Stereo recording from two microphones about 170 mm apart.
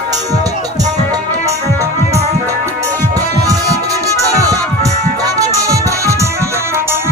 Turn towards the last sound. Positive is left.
turn(degrees=-20)  # may be behind; listen again after turning